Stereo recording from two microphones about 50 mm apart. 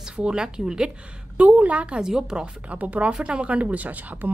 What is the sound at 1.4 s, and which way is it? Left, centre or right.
A woman's voice, right.